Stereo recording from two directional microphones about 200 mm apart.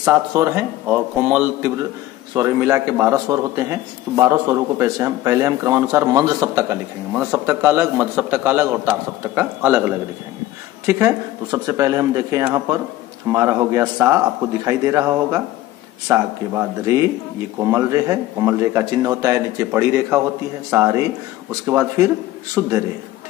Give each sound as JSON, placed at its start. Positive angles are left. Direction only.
{"t": 0.0, "sound": "speech", "side_deg": -15}
{"t": 10.9, "sound": "speech", "side_deg": -15}